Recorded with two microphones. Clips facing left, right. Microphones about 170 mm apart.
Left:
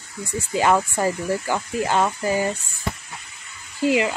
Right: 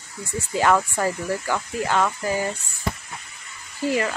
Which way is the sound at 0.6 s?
15° left (ahead or behind).